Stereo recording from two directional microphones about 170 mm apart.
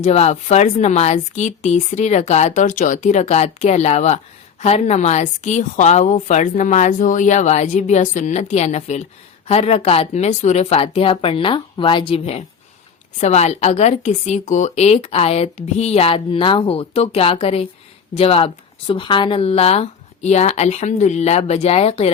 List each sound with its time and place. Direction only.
0.0 s a woman's voice: 40° left (ahead or behind)